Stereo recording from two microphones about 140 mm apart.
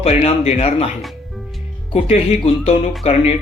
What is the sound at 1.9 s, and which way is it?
Speech, 45° left (ahead or behind).